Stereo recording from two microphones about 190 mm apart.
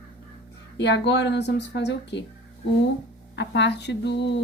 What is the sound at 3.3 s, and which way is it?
Speech, 65° left (ahead or behind).